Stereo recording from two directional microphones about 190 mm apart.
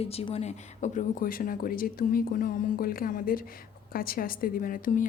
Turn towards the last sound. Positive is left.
turn(degrees=45)  # may be behind; listen again after turning